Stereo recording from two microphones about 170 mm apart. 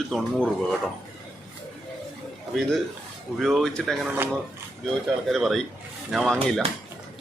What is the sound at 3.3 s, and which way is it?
Speech, centre (ahead or behind).